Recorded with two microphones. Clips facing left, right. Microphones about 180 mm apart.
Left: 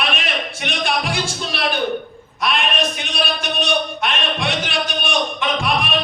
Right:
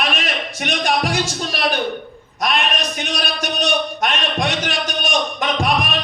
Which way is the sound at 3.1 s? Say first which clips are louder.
Left 1 dB; 40° right (ahead or behind).